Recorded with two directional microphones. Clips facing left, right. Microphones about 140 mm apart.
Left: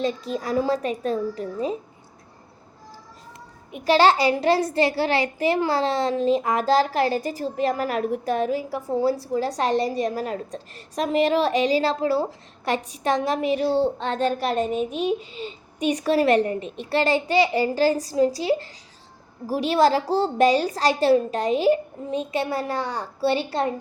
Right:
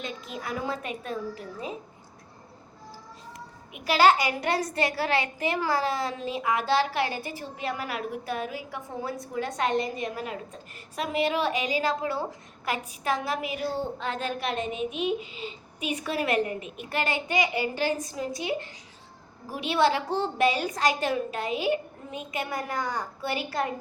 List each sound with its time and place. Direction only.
0.0 s a child's voice: 35° left (ahead or behind)
3.7 s a child's voice: 35° left (ahead or behind)